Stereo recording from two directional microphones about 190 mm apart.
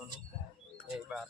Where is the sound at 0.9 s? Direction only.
Centre (ahead or behind).